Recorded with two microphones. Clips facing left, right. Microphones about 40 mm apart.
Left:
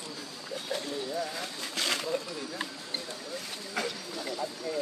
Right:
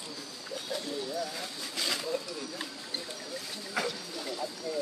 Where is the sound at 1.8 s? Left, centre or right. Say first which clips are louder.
Left 2 dB; left.